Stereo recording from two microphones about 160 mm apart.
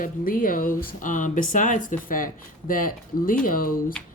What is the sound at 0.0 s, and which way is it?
Speech, 60° left (ahead or behind).